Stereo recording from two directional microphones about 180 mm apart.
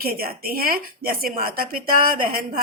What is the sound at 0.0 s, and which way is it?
A woman's voice, 55° right (ahead or behind).